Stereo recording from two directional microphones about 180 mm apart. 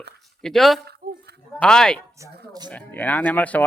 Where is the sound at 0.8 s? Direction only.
65° right (ahead or behind).